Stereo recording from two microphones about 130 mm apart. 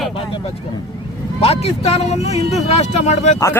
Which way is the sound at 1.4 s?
50° left (ahead or behind).